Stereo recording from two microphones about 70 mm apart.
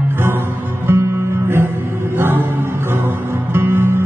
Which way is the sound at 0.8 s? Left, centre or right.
Right.